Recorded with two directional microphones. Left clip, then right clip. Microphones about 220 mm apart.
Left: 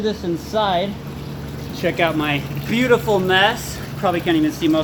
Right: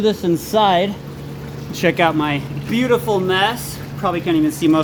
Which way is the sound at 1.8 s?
35° right (ahead or behind).